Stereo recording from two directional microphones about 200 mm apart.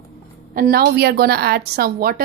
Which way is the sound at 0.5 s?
50° right (ahead or behind).